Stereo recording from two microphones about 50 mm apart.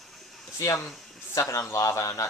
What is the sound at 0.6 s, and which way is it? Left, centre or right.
Speech, left.